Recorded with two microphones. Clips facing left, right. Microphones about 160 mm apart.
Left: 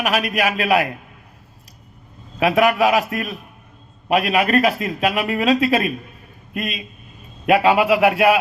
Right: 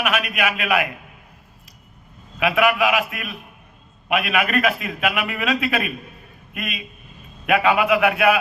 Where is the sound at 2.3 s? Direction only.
40° left (ahead or behind).